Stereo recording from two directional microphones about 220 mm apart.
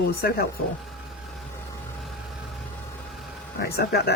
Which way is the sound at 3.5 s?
45° left (ahead or behind).